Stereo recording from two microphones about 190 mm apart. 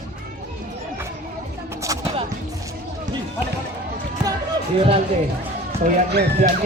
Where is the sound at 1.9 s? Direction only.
15° right (ahead or behind).